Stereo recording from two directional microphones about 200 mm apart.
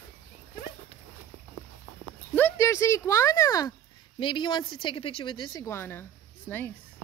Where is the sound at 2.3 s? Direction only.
10° left (ahead or behind).